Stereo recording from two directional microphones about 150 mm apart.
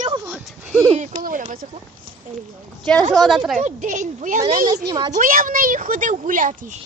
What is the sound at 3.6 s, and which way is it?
Speech, 55° right (ahead or behind).